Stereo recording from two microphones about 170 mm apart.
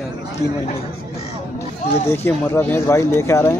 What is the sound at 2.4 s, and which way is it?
Speech, 15° left (ahead or behind).